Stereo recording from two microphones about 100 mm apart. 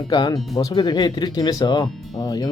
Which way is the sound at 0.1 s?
45° left (ahead or behind).